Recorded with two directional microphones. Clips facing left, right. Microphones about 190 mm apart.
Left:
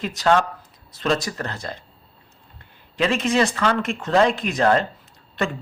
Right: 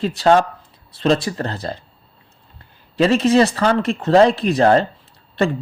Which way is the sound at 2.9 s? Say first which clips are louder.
Right 6 dB; 35° right (ahead or behind).